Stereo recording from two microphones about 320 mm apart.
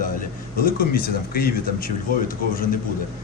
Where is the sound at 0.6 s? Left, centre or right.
Left.